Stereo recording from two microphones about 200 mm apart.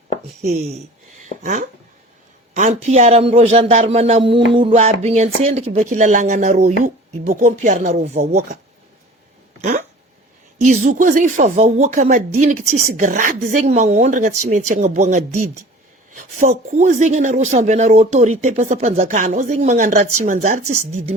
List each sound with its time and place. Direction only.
0.4 s speech: 40° right (ahead or behind)
1.2 s a sound: 40° right (ahead or behind)
2.6 s speech: 35° right (ahead or behind)
10.6 s speech: 35° right (ahead or behind)